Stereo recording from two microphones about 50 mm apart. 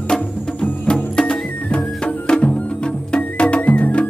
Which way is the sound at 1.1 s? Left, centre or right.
Centre.